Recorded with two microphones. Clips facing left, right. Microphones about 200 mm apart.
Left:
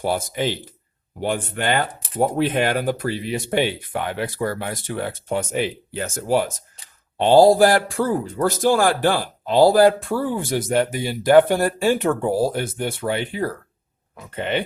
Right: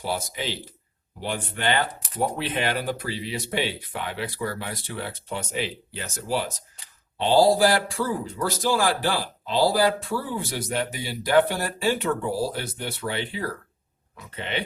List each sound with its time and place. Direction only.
0.0 s speech: 50° left (ahead or behind)